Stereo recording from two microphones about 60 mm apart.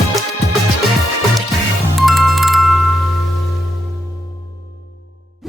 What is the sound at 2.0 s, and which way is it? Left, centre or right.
Music, centre.